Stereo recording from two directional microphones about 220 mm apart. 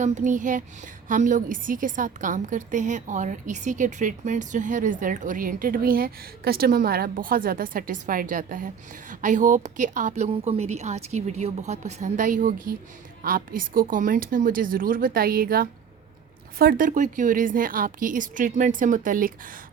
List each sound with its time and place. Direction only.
0.0 s a woman's voice: 35° right (ahead or behind)